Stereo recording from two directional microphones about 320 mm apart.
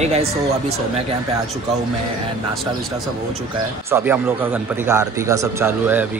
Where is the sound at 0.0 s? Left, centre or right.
Centre.